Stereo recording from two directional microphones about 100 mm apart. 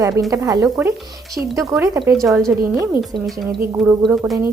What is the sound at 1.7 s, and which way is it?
Speech, 35° right (ahead or behind).